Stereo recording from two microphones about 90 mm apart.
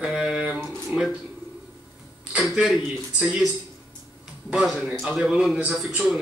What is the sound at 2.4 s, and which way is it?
A man's voice, centre (ahead or behind).